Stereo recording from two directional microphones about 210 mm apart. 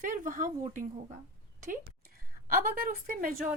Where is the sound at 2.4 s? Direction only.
45° right (ahead or behind).